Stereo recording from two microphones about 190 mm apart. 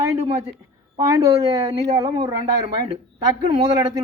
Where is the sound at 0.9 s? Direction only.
15° right (ahead or behind).